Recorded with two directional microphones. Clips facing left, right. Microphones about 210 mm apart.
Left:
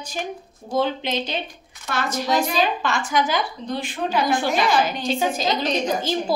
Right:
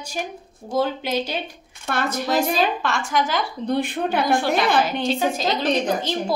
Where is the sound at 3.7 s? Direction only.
60° right (ahead or behind).